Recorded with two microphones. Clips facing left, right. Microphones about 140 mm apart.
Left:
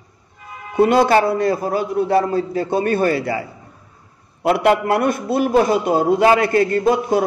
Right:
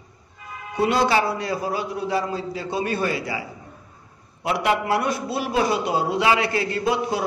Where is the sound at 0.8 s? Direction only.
50° left (ahead or behind).